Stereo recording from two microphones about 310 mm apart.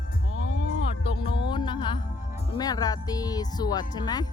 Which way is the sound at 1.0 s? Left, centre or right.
Centre.